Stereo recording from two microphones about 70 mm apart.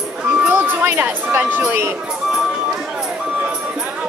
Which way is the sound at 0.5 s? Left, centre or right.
Right.